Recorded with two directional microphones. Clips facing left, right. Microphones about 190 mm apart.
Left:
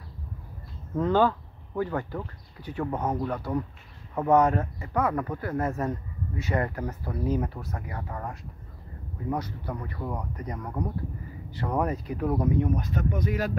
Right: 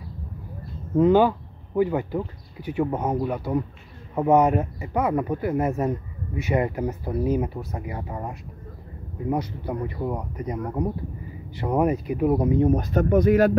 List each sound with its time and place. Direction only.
0.9 s speech: 15° right (ahead or behind)
12.6 s speech: 40° right (ahead or behind)
13.1 s speech: 60° right (ahead or behind)